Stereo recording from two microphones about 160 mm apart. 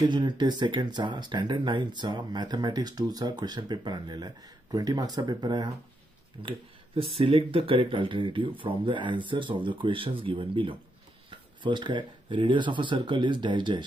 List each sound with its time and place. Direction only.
0.0 s speech: 25° right (ahead or behind)